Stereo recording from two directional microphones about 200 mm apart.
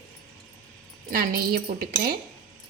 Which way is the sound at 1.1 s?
50° right (ahead or behind).